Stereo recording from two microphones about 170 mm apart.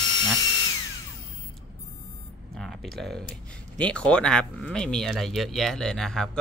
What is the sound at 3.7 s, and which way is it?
Speech, 5° left (ahead or behind).